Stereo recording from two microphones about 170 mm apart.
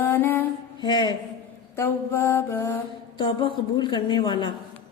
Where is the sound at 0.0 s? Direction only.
10° left (ahead or behind).